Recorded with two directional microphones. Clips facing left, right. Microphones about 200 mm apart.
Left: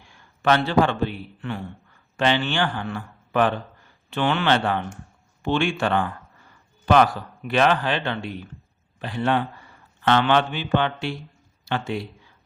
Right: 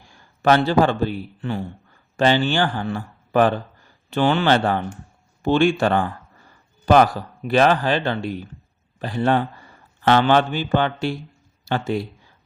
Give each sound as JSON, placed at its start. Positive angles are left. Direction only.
{"t": 0.4, "sound": "a man's voice", "side_deg": -40}